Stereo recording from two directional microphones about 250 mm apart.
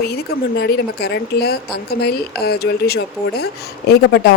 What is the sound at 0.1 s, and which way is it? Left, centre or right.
Speech, left.